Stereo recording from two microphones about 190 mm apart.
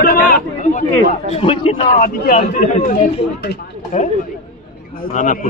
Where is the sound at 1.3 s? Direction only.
30° left (ahead or behind).